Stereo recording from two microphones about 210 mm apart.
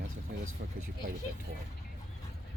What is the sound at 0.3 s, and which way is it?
Speech, 50° right (ahead or behind).